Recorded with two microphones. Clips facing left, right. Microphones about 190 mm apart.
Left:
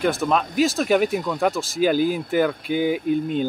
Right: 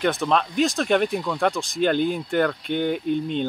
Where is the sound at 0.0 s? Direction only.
Centre (ahead or behind).